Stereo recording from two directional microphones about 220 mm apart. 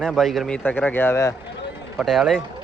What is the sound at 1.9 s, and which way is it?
Speech, centre (ahead or behind).